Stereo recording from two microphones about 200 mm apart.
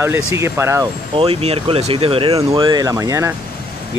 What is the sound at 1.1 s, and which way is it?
Speech, 30° right (ahead or behind).